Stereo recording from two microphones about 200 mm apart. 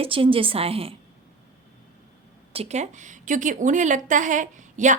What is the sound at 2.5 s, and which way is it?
A woman's voice, 35° right (ahead or behind).